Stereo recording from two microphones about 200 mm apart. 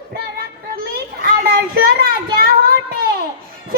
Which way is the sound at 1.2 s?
45° right (ahead or behind).